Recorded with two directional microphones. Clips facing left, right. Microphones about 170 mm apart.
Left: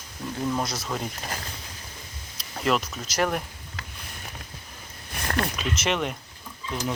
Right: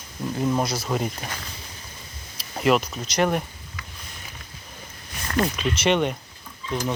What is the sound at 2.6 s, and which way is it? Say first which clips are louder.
Speech: right 5 dB; 5° right (ahead or behind).